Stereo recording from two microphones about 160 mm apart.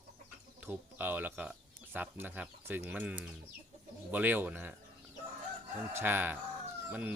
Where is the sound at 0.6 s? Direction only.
10° right (ahead or behind).